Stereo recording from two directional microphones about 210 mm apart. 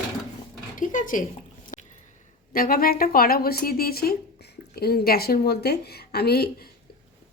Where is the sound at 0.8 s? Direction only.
40° left (ahead or behind).